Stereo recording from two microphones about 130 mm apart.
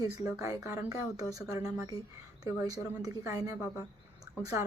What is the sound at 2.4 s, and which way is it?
Speech, 30° right (ahead or behind).